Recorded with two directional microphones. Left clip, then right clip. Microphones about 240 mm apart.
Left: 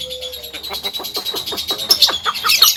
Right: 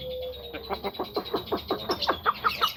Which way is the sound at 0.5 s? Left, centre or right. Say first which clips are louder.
Left 7 dB; centre.